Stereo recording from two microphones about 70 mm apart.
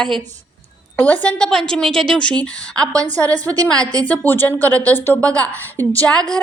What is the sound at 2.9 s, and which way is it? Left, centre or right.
Speech, right.